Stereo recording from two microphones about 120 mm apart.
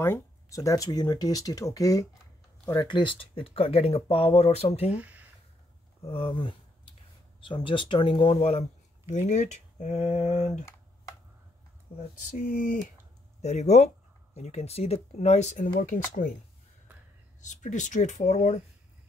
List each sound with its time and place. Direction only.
0.0 s speech: 20° left (ahead or behind); by 4.9 s 60° left (ahead or behind)
4.9 s speech: 10° right (ahead or behind)
6.0 s speech: 45° left (ahead or behind); by 10.5 s 70° left (ahead or behind)
12.4 s speech: 90° left
13.4 s speech: 70° left (ahead or behind); by 16.3 s 90° left
17.4 s speech: 90° left